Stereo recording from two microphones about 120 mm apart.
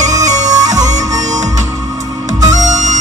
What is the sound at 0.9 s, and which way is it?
Music, 80° right.